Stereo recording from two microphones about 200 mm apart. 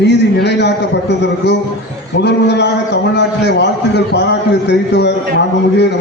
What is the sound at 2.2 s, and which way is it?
A man's voice, 60° left (ahead or behind).